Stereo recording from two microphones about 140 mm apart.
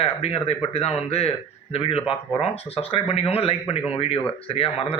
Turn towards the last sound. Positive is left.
turn(degrees=40)  # may be behind; listen again after turning